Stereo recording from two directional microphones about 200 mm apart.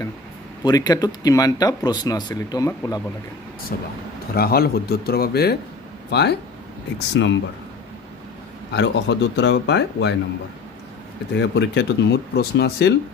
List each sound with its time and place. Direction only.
0.7 s speech: 20° left (ahead or behind)
3.7 s speech: 50° left (ahead or behind); by 7.3 s 65° left (ahead or behind)
8.7 s speech: 60° left (ahead or behind)
11.3 s speech: 60° left (ahead or behind)